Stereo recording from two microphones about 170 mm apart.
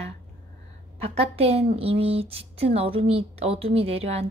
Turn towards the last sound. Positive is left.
turn(degrees=-35)  # may be behind; listen again after turning